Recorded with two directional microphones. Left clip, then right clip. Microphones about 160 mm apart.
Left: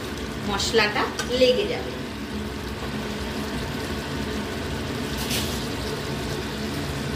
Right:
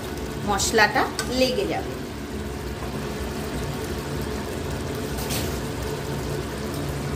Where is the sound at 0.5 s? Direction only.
90° right.